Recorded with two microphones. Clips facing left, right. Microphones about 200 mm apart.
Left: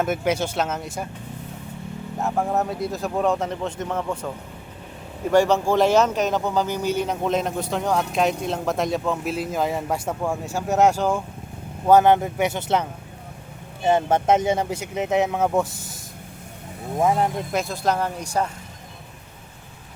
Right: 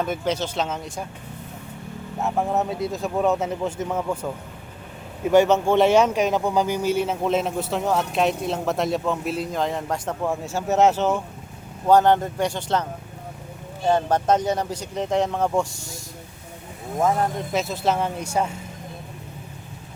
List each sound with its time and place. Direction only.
0.0 s speech: 10° left (ahead or behind)
2.1 s a man's voice: centre (ahead or behind)
5.3 s a man's voice: 5° right (ahead or behind)
14.1 s speech: 25° left (ahead or behind)
14.6 s speech: 10° left (ahead or behind)
17.5 s a man's voice: 5° right (ahead or behind)